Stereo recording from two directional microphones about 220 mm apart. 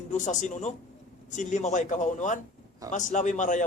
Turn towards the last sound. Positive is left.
turn(degrees=35)  # may be behind; listen again after turning